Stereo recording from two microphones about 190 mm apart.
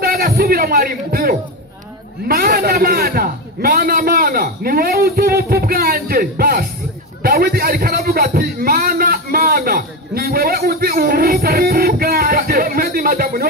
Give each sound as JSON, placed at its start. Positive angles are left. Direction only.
{"t": 0.0, "sound": "a man's voice", "side_deg": -50}